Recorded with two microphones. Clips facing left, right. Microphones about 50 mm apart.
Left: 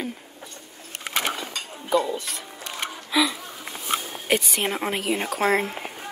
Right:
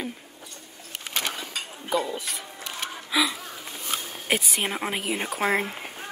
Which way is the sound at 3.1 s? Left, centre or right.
Centre.